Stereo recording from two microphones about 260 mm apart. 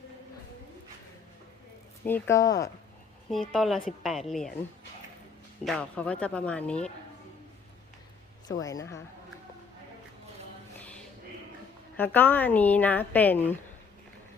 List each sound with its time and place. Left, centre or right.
2.0 s a woman's voice: centre
3.5 s speech: centre
5.6 s speech: centre
8.6 s a woman's voice: centre
10.8 s a sound: centre
11.9 s a woman's voice: centre